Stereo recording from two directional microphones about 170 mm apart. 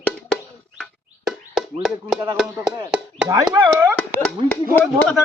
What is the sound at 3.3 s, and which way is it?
Speech, 20° right (ahead or behind).